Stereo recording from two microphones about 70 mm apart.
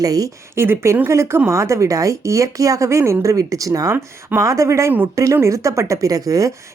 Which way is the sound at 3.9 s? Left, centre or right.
Right.